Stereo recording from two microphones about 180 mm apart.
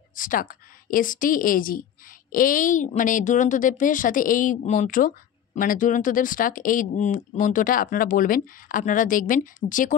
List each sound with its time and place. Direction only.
0.1 s speech: 50° left (ahead or behind)